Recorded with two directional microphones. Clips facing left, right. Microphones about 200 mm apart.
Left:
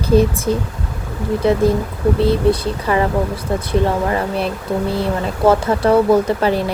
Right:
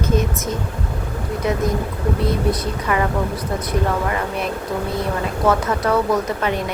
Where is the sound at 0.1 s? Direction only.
35° left (ahead or behind).